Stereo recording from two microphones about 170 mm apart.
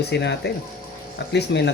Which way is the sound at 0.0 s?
85° left.